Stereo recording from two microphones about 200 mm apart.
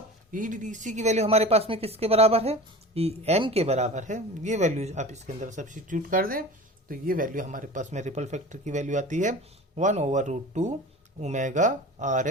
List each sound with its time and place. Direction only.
0.3 s speech: 40° right (ahead or behind)